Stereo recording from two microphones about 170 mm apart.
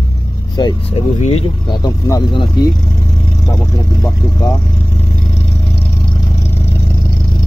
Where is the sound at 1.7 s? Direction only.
20° left (ahead or behind).